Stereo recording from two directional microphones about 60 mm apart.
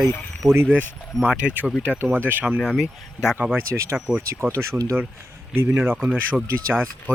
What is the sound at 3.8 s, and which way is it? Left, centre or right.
Speech, right.